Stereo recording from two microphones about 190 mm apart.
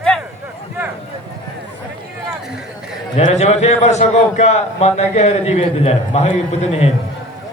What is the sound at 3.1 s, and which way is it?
A man's voice, 35° left (ahead or behind).